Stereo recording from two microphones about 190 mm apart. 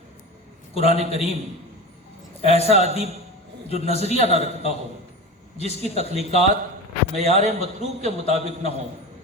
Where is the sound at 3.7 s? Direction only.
35° left (ahead or behind).